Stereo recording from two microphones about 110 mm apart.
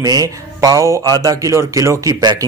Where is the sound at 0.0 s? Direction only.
35° right (ahead or behind).